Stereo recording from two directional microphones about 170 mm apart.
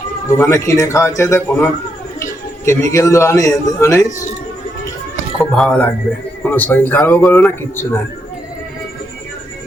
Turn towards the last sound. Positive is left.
turn(degrees=10)  # may be behind; listen again after turning